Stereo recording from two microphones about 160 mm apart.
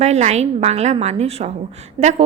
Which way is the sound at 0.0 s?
45° right (ahead or behind).